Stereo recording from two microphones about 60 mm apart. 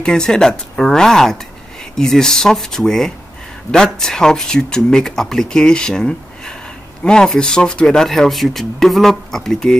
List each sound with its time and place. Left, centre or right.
0.0 s speech: centre